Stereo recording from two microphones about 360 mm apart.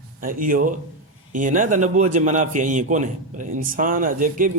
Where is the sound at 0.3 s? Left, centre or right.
Right.